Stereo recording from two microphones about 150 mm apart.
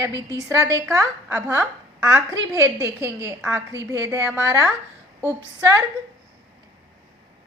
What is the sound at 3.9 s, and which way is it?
Speech, 20° right (ahead or behind).